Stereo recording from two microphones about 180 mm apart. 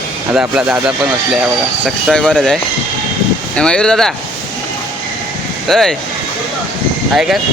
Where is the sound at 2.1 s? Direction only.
5° left (ahead or behind).